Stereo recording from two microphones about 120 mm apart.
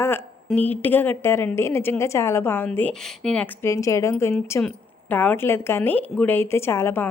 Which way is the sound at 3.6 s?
25° left (ahead or behind).